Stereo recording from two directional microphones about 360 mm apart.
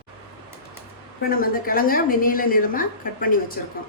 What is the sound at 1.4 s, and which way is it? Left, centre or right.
A woman's voice, left.